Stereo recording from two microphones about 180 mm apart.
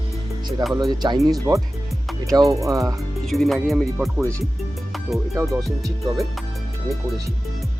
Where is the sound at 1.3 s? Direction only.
20° right (ahead or behind).